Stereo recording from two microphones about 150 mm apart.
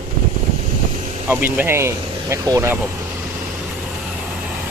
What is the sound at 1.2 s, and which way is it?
Speech, 15° right (ahead or behind).